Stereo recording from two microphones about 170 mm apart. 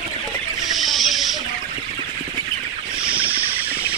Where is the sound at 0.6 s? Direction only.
Centre (ahead or behind).